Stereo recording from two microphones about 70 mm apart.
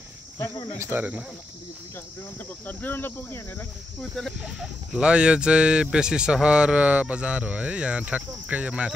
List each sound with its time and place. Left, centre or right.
0.7 s speech: right
2.6 s speech: left
4.0 s speech: centre
4.4 s speech: centre